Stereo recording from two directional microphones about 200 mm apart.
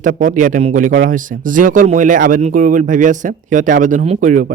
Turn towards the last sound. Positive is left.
turn(degrees=-40)  # may be behind; listen again after turning